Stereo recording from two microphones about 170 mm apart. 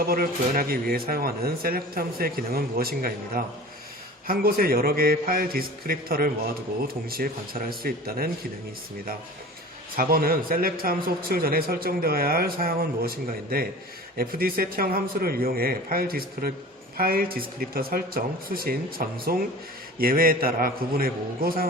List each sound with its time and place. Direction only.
0.1 s a man's voice: 60° right (ahead or behind)
10.0 s a man's voice: 60° right (ahead or behind)